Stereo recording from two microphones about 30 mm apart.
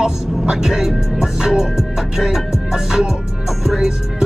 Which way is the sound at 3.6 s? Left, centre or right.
Centre.